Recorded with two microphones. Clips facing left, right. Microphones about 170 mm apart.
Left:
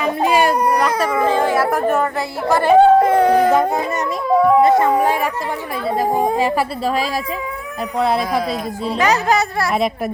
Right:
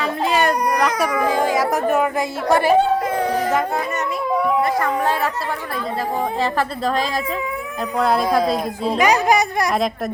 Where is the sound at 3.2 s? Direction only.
60° left (ahead or behind).